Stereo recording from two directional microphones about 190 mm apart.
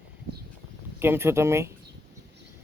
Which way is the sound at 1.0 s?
10° right (ahead or behind).